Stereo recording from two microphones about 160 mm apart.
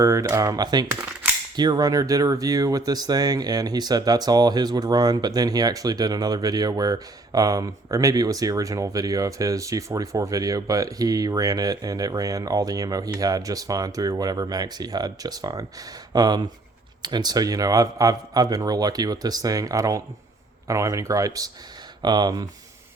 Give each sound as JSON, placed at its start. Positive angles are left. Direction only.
{"t": 0.0, "sound": "speech", "side_deg": -20}
{"t": 0.9, "sound": "coin", "side_deg": -10}
{"t": 1.5, "sound": "speech", "side_deg": -25}